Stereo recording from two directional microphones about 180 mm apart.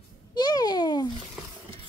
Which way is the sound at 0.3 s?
20° left (ahead or behind).